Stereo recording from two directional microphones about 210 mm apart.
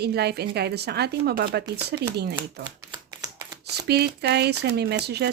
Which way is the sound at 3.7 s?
50° right (ahead or behind).